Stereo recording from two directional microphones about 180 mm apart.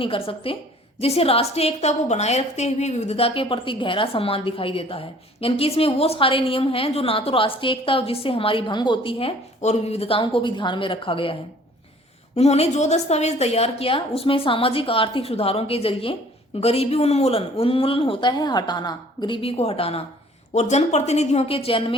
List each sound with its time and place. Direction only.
0.0 s a woman's voice: 30° left (ahead or behind)
12.4 s a woman's voice: 35° left (ahead or behind)